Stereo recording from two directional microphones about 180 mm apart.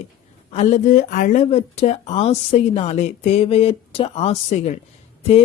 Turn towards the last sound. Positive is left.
turn(degrees=35)  # may be behind; listen again after turning